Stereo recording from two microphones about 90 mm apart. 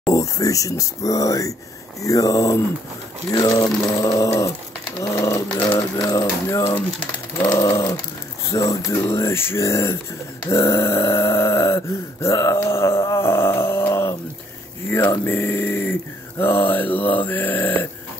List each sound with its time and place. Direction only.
0.1 s speech: 40° left (ahead or behind); by 17.8 s 20° left (ahead or behind)